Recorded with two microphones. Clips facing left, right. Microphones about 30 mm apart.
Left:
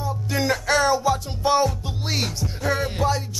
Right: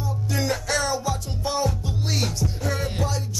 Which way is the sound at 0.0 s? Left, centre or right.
Centre.